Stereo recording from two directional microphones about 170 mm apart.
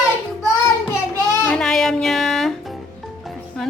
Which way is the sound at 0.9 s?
15° left (ahead or behind).